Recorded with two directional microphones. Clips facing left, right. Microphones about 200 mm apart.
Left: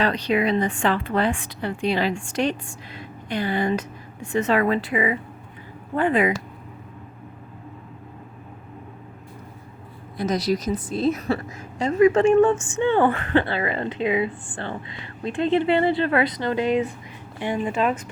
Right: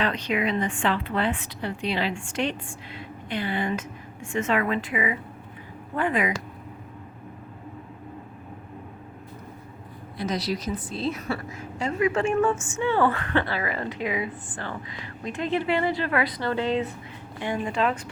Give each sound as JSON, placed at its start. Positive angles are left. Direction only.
{"t": 0.0, "sound": "a woman's voice", "side_deg": 35}
{"t": 10.2, "sound": "a woman's voice", "side_deg": 45}